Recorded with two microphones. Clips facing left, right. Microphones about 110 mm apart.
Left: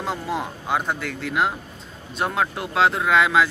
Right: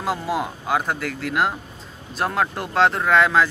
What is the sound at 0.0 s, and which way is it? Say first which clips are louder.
Speech: right 2 dB; 5° right (ahead or behind).